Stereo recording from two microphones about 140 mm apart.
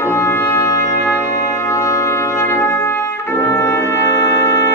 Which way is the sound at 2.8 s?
20° left (ahead or behind).